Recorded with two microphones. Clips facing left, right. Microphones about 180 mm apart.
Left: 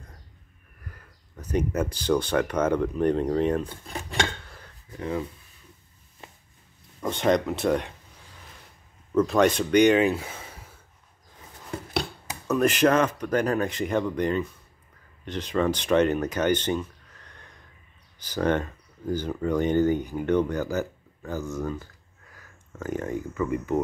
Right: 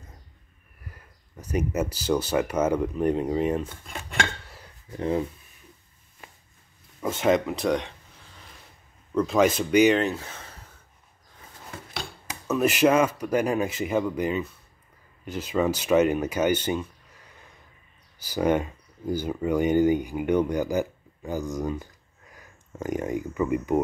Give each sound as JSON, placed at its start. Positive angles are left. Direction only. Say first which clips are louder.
{"t": 1.3, "sound": "speech", "louder": "left 1 dB", "side_deg": -10}
{"t": 4.9, "sound": "speech", "louder": "right 4 dB", "side_deg": -30}
{"t": 7.0, "sound": "speech", "louder": "right 1 dB", "side_deg": -5}
{"t": 9.1, "sound": "speech", "louder": "left 1 dB", "side_deg": 0}
{"t": 9.9, "sound": "speech", "louder": "left 4 dB", "side_deg": 10}
{"t": 12.4, "sound": "speech", "louder": "even", "side_deg": -5}